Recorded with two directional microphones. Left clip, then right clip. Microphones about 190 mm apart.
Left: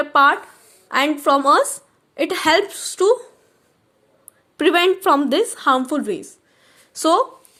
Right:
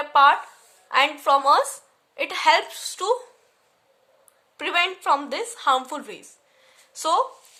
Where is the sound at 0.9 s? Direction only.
25° left (ahead or behind).